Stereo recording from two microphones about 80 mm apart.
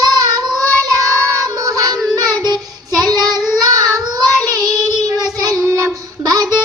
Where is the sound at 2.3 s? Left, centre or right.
Right.